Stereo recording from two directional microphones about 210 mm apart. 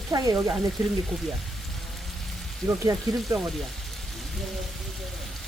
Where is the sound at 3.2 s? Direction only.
Centre (ahead or behind).